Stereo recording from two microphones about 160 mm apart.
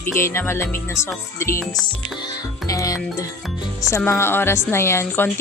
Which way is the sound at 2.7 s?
20° left (ahead or behind).